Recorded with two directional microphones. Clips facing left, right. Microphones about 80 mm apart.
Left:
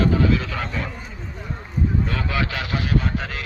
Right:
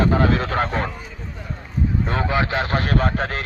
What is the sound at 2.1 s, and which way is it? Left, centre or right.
Speech, right.